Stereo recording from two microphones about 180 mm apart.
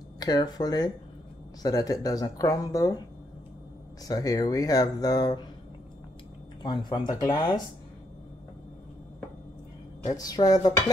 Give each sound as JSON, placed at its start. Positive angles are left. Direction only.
{"t": 0.2, "sound": "speech", "side_deg": 20}
{"t": 4.1, "sound": "speech", "side_deg": 20}
{"t": 6.6, "sound": "speech", "side_deg": 25}
{"t": 10.1, "sound": "speech", "side_deg": 20}